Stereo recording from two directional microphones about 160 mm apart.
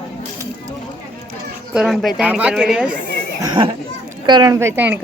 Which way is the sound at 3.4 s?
30° right (ahead or behind).